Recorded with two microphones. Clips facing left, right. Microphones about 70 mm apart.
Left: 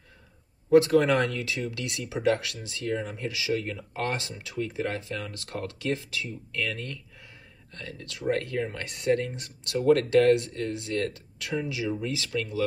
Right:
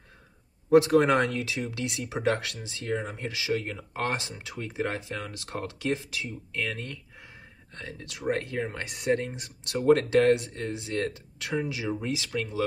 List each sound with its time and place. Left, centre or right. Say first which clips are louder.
0.7 s speech: even; right